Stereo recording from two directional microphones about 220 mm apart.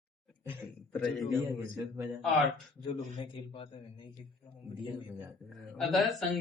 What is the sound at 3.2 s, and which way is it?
Speech, 25° left (ahead or behind).